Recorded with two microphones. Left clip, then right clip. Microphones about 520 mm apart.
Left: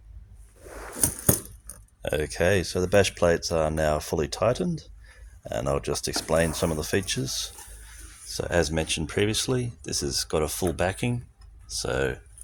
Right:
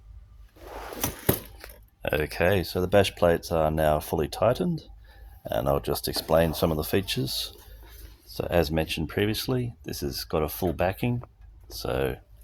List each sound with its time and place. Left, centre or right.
2.0 s speech: left